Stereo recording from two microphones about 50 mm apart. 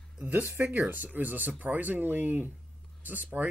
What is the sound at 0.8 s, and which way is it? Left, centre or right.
Speech, right.